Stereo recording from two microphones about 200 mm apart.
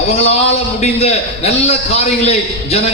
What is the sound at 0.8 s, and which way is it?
A man's voice, 30° left (ahead or behind).